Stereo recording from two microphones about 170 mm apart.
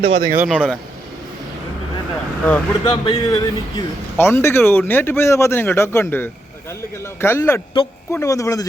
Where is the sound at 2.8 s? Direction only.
30° left (ahead or behind).